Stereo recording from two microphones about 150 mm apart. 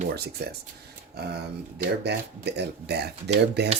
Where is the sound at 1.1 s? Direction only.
90° right.